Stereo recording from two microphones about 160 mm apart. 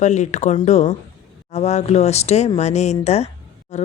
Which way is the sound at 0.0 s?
45° left (ahead or behind).